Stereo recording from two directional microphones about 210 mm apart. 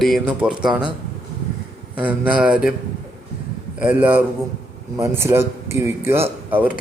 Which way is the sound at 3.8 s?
10° right (ahead or behind).